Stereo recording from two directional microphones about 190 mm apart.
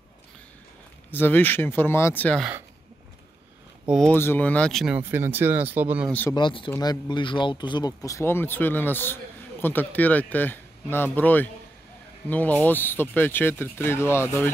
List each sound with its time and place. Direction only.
1.1 s speech: 10° left (ahead or behind)
3.8 s speech: centre (ahead or behind)
4.1 s speech: 10° left (ahead or behind); by 6.0 s 10° right (ahead or behind)
6.0 s speech: 10° left (ahead or behind)
6.3 s speech: 25° left (ahead or behind)